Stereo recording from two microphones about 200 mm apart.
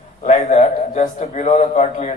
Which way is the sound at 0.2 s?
35° left (ahead or behind).